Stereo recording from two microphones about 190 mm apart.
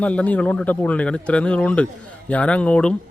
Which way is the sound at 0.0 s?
5° left (ahead or behind).